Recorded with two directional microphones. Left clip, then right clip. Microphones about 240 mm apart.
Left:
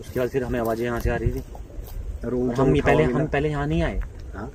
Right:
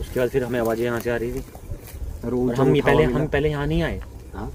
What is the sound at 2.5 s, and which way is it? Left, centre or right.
Speech, centre.